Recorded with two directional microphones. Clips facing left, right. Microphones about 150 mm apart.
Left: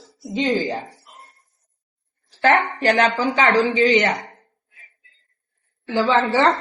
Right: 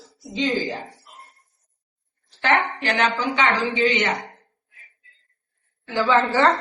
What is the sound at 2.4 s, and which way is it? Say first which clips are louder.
A woman's voice: left 4 dB; 40° left (ahead or behind).